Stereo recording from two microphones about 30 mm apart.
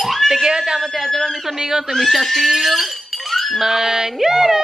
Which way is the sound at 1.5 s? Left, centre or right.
Right.